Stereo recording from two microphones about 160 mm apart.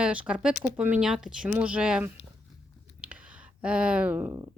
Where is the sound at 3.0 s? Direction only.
10° right (ahead or behind).